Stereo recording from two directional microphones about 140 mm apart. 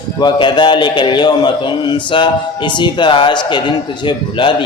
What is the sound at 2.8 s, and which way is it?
Speech, 35° left (ahead or behind).